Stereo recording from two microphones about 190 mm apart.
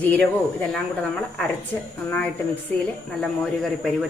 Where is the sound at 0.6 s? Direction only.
5° left (ahead or behind).